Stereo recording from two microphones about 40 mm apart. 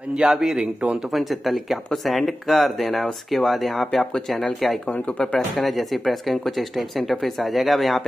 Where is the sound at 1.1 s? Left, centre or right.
Centre.